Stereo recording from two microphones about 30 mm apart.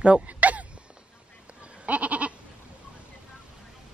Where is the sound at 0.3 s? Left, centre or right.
Right.